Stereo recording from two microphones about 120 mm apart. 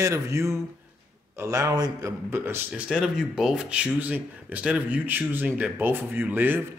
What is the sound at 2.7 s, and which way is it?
A man's voice, 10° right (ahead or behind).